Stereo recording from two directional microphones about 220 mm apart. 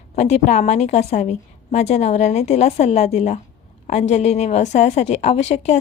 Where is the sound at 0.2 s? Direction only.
30° left (ahead or behind).